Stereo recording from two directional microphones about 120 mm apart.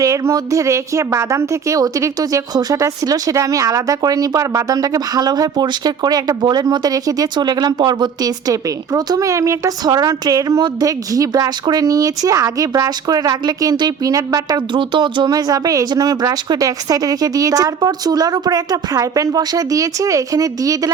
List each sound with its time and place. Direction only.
0.0 s a woman's voice: 25° right (ahead or behind)
14.7 s a woman's voice: 40° right (ahead or behind)